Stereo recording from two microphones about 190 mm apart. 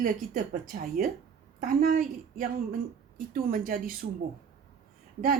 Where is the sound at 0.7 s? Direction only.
50° right (ahead or behind).